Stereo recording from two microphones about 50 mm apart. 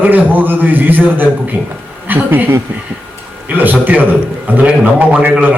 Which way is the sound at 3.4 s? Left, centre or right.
Right.